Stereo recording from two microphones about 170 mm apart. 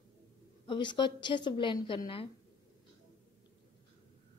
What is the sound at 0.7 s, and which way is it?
A woman's voice, 25° left (ahead or behind).